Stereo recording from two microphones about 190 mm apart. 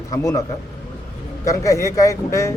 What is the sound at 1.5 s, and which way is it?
A man's voice, 15° left (ahead or behind).